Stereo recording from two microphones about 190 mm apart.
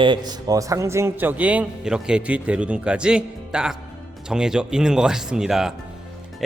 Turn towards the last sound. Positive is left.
turn(degrees=-5)  # may be behind; listen again after turning